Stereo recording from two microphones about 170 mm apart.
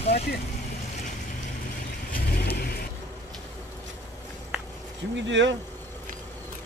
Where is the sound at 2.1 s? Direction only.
65° left (ahead or behind).